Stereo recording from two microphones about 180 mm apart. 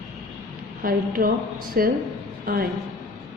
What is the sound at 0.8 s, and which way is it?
A woman's voice, 50° right (ahead or behind).